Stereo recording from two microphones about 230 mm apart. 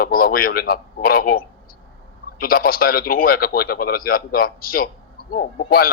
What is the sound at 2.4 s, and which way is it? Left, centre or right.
Speech, left.